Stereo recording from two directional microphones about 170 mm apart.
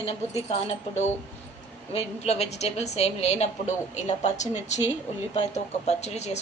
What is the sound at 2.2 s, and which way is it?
Speech, 40° left (ahead or behind).